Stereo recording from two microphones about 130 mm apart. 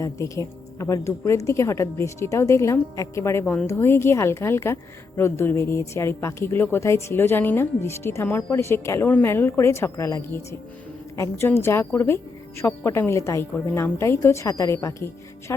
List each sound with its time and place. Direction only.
0.0 s a woman's voice: 25° left (ahead or behind)